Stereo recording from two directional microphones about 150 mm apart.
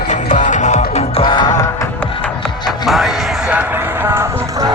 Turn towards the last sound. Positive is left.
turn(degrees=-15)  # may be behind; listen again after turning